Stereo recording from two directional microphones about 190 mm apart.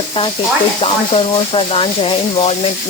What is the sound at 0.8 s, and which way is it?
Speech, 30° left (ahead or behind).